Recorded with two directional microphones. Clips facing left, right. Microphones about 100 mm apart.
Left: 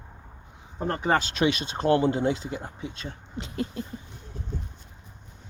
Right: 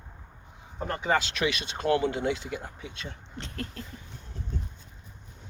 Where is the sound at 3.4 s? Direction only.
10° left (ahead or behind).